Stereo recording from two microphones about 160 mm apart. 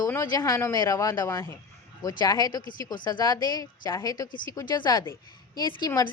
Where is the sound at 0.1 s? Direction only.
20° left (ahead or behind).